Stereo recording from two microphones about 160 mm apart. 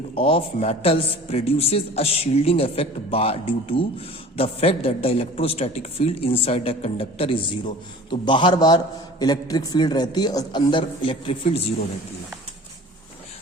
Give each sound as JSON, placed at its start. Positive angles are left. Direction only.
{"t": 0.2, "sound": "a man's voice", "side_deg": 35}